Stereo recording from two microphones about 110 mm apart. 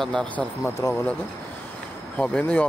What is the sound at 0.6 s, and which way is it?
Speech, 25° left (ahead or behind).